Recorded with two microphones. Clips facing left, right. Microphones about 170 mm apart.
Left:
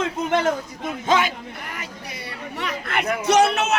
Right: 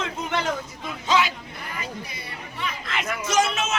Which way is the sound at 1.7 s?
75° left (ahead or behind).